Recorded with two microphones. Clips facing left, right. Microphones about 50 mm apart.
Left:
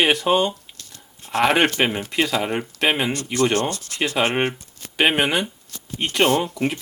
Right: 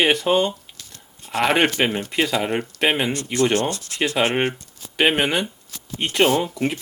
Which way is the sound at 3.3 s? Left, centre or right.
Right.